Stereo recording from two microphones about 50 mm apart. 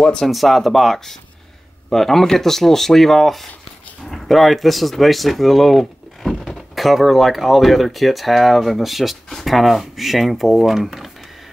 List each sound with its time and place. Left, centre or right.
0.0 s speech: centre
0.3 s speech: centre